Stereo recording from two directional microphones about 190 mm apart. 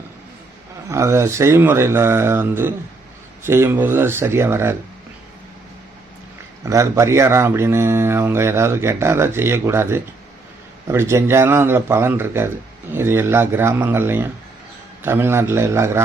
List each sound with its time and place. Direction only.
0.9 s speech: 15° right (ahead or behind)
6.7 s speech: 15° right (ahead or behind)